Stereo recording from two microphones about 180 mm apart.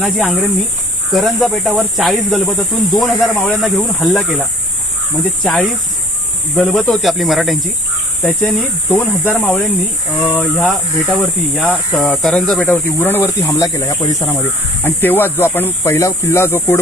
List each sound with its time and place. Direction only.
0.0 s speech: centre (ahead or behind)